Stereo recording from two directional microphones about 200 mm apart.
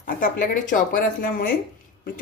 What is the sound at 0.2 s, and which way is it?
A woman's voice, 45° left (ahead or behind).